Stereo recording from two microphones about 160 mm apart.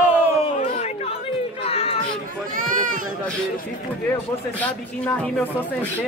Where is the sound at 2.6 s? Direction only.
60° right (ahead or behind).